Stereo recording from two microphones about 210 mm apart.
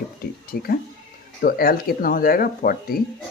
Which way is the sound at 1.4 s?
45° left (ahead or behind).